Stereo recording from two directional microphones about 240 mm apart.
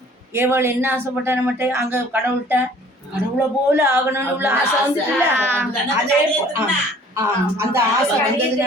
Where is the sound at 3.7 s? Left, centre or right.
Centre.